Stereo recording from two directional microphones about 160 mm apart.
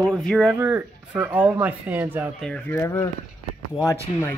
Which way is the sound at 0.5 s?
10° right (ahead or behind).